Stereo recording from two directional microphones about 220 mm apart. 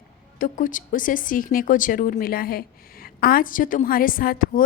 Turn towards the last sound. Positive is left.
turn(degrees=40)  # may be behind; listen again after turning